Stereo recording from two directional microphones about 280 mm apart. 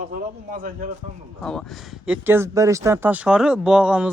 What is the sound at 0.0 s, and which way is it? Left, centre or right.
Speech, right.